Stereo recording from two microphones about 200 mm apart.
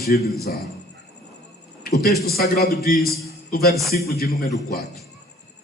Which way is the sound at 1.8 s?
55° left (ahead or behind).